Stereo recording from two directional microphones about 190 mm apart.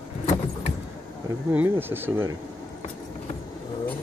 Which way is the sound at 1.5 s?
10° right (ahead or behind).